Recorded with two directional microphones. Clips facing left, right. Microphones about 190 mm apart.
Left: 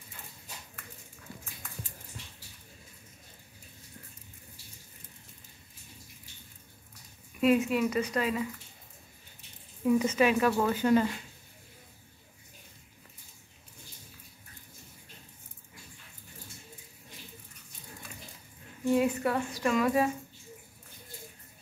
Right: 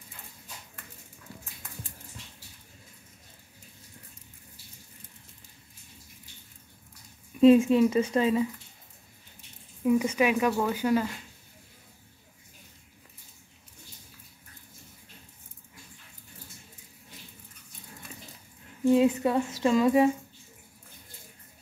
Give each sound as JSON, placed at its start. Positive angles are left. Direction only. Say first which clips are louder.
{"t": 7.3, "sound": "speech", "louder": "right 7 dB", "side_deg": -25}
{"t": 9.8, "sound": "speech", "louder": "right 1 dB", "side_deg": -10}
{"t": 18.9, "sound": "speech", "louder": "right 3 dB", "side_deg": -20}